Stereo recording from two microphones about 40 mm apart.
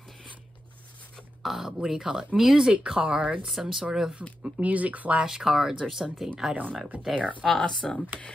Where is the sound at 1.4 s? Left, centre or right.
Centre.